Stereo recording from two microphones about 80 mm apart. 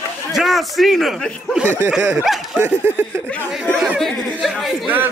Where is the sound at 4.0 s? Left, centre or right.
Centre.